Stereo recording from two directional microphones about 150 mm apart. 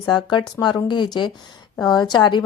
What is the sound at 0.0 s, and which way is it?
A woman's voice, 30° left (ahead or behind).